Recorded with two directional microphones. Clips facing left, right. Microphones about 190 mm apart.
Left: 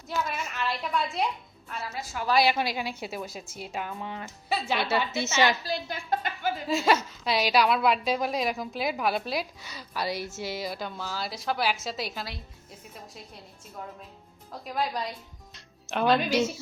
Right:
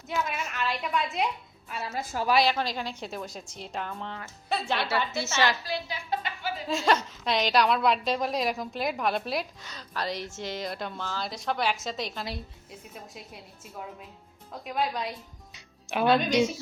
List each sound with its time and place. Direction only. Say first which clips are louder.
0.3 s a woman's voice: even; 5° right (ahead or behind)
1.9 s a woman's voice: right 6 dB; 40° right (ahead or behind)
2.3 s a woman's voice: left 1 dB; 10° left (ahead or behind)
5.1 s a woman's voice: left 3 dB; 20° left (ahead or behind)
5.6 s a sound: left 1 dB; 50° left (ahead or behind)
6.7 s a woman's voice: even; 5° left (ahead or behind)
14.6 s a woman's voice: right 1 dB; centre (ahead or behind)
15.5 s music: right 1 dB; 5° right (ahead or behind)